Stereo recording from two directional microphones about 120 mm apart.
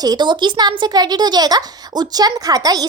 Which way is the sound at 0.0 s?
35° right (ahead or behind).